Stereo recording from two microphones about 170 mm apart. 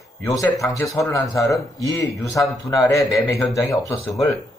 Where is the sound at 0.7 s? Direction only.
20° left (ahead or behind).